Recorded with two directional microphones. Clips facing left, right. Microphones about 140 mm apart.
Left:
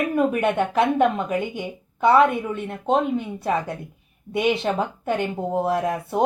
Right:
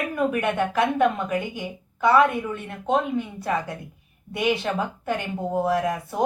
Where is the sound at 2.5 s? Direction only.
25° left (ahead or behind).